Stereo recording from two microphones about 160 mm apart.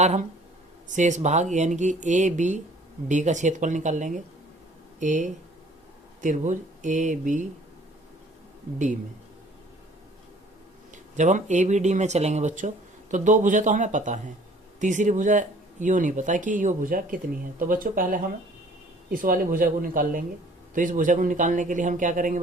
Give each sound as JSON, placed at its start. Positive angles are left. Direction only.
{"t": 0.0, "sound": "speech", "side_deg": -45}
{"t": 10.9, "sound": "speech", "side_deg": -50}